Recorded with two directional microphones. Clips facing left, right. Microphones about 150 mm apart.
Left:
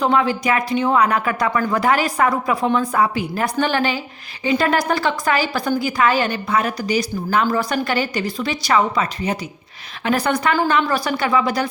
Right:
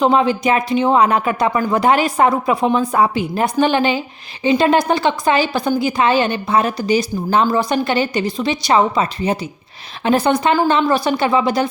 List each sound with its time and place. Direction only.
0.0 s a woman's voice: 20° right (ahead or behind)